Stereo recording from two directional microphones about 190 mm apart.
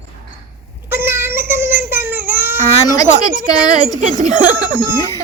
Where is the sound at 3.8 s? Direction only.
35° right (ahead or behind).